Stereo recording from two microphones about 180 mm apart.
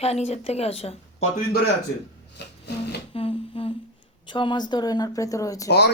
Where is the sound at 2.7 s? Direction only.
65° left (ahead or behind).